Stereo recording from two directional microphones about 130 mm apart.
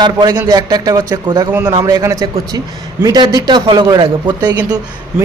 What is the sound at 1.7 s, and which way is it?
Speech, 25° right (ahead or behind).